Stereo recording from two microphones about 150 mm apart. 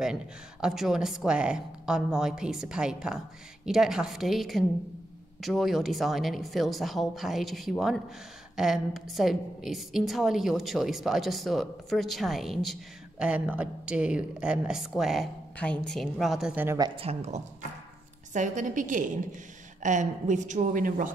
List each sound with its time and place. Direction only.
0.0 s a woman's voice: 5° right (ahead or behind)
15.5 s a woman's voice: 10° left (ahead or behind)
16.5 s a woman's voice: 15° right (ahead or behind)
16.8 s speech: 40° right (ahead or behind)
18.3 s a woman's voice: 60° right (ahead or behind)